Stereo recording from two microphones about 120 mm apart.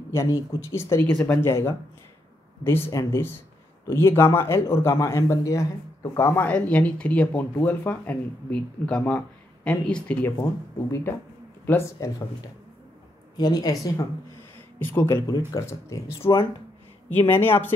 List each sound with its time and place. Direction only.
0.1 s speech: 20° left (ahead or behind)
10.3 s speech: 25° left (ahead or behind)
13.4 s speech: 35° left (ahead or behind)
14.8 s speech: 15° left (ahead or behind)
15.2 s speech: 30° left (ahead or behind)
16.2 s speech: 45° left (ahead or behind)
17.1 s speech: 20° left (ahead or behind)